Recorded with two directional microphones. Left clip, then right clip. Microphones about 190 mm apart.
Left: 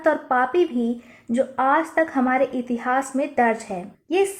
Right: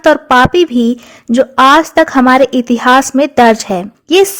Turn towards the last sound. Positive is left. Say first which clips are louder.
# right 14 dB
turn(degrees=-55)  # may be behind; listen again after turning